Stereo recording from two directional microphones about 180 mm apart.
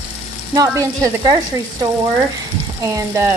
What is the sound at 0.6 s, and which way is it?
Frying, 20° right (ahead or behind).